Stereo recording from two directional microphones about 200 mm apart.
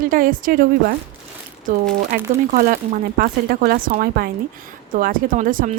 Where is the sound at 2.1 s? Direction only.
45° right (ahead or behind).